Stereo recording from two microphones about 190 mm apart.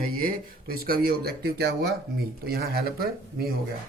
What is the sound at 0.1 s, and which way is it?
Speech, 50° right (ahead or behind).